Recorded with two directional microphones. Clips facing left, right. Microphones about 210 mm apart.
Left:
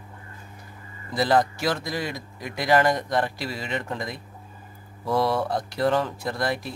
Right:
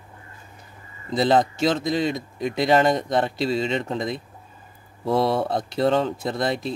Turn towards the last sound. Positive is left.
turn(degrees=-20)  # may be behind; listen again after turning